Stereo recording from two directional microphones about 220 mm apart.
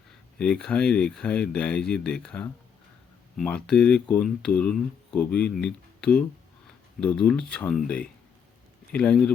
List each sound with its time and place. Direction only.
0.3 s speech: 5° left (ahead or behind)